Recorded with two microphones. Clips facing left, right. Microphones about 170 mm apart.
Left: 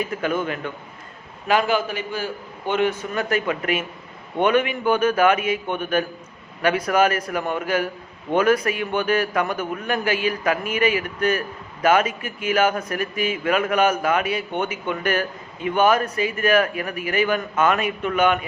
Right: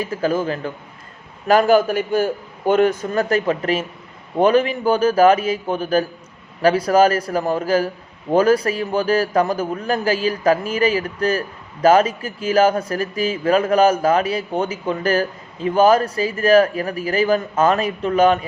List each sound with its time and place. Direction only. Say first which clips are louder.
0.0 s a man's voice: right 3 dB; 35° right (ahead or behind)